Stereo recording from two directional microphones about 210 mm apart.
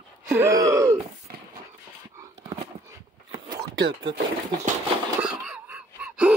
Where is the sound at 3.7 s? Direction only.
55° right (ahead or behind).